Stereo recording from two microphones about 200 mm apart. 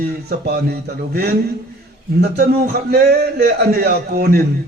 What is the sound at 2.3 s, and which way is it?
A man's voice, 55° right (ahead or behind).